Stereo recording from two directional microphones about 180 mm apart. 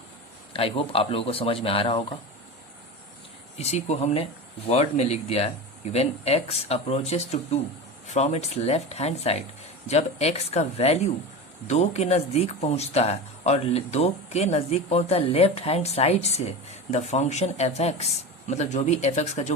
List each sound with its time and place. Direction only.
0.5 s speech: 30° left (ahead or behind)
3.6 s speech: 40° left (ahead or behind)